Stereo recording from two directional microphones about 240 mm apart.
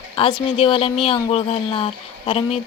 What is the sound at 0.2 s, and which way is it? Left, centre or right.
A woman's voice, left.